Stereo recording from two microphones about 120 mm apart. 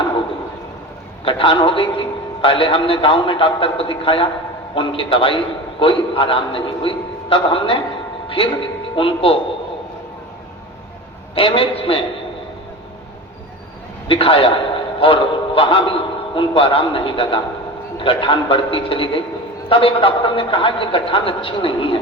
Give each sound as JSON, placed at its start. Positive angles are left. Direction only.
{"t": 1.2, "sound": "a man's voice", "side_deg": 45}
{"t": 11.3, "sound": "a man's voice", "side_deg": 50}
{"t": 14.1, "sound": "a man's voice", "side_deg": 50}